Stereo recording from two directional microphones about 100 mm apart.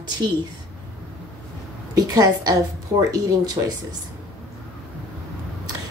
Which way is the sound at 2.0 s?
40° right (ahead or behind).